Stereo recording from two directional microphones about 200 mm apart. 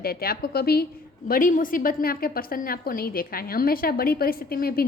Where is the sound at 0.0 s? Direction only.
50° left (ahead or behind).